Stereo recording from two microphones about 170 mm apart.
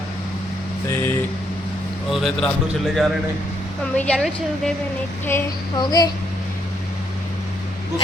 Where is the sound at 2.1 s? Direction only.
Centre (ahead or behind).